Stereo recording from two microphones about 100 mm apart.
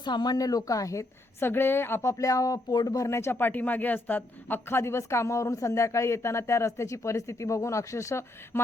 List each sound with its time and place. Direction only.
0.0 s a woman's voice: 45° left (ahead or behind); by 8.6 s 30° left (ahead or behind)